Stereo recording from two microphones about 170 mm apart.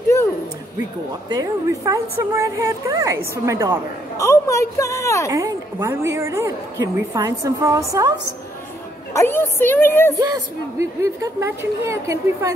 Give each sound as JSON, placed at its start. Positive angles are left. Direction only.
{"t": 1.3, "sound": "a woman's voice", "side_deg": -20}
{"t": 4.2, "sound": "a woman's voice", "side_deg": 15}
{"t": 5.3, "sound": "a woman's voice", "side_deg": -15}
{"t": 9.1, "sound": "a woman's voice", "side_deg": 15}
{"t": 10.1, "sound": "a woman's voice", "side_deg": -20}